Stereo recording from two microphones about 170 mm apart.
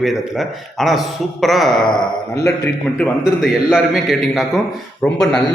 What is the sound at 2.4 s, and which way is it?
Speech, 15° left (ahead or behind).